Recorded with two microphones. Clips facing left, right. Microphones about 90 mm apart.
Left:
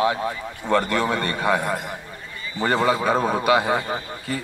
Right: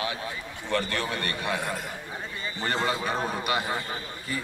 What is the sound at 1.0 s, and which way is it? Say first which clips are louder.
Speech: left 8 dB; 50° left (ahead or behind).